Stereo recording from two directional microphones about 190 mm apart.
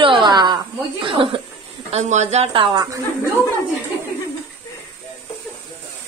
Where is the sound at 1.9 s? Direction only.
35° right (ahead or behind).